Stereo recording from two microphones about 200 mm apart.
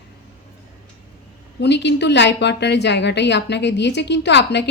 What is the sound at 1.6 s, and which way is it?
A woman's voice, 60° left (ahead or behind).